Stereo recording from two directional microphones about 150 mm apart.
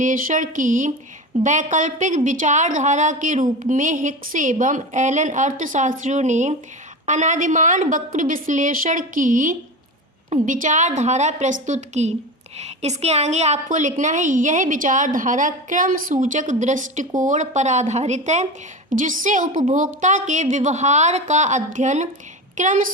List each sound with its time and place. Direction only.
0.0 s a woman's voice: 60° right (ahead or behind)